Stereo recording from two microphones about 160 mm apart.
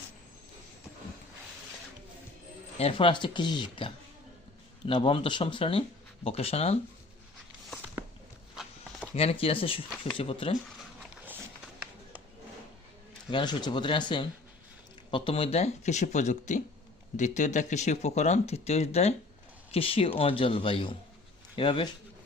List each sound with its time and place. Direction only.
2.7 s speech: 35° left (ahead or behind)
9.1 s speech: 35° left (ahead or behind)
13.3 s speech: 25° left (ahead or behind)